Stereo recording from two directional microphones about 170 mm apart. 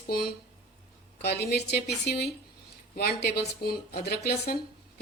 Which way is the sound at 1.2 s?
75° left (ahead or behind).